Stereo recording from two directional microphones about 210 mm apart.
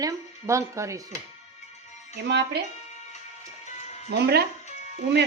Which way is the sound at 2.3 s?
50° right (ahead or behind).